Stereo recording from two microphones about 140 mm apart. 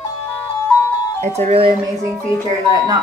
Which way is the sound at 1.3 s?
45° right (ahead or behind).